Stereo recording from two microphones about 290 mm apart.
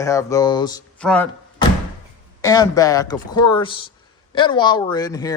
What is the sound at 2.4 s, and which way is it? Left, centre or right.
Speech, centre.